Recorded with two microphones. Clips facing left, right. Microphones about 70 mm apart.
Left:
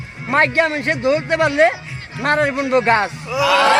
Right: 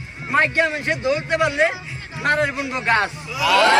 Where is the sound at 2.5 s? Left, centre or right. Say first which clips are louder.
Left 9 dB; left.